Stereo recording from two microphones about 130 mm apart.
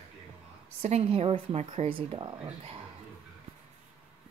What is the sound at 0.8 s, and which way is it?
Speech, 50° right (ahead or behind).